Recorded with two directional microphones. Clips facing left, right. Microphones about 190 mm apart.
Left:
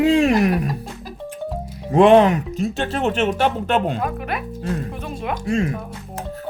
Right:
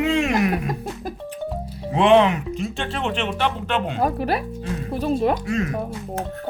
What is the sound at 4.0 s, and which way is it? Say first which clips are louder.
Speech: right 4 dB; 35° right (ahead or behind).